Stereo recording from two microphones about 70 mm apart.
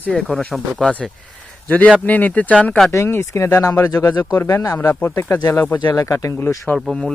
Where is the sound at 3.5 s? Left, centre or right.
Left.